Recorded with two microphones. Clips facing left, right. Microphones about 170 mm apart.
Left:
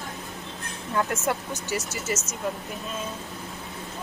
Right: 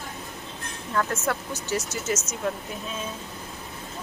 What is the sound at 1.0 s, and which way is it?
Speech, 20° left (ahead or behind).